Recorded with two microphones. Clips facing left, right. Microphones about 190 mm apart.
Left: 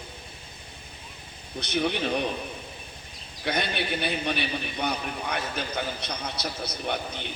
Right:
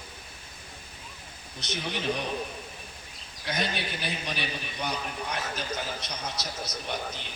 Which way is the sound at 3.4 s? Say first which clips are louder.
Left 3 dB; 60° left (ahead or behind).